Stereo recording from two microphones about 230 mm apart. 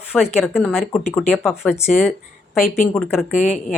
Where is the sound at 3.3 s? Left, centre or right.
Left.